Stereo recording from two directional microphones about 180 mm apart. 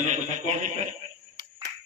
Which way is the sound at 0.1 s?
40° right (ahead or behind).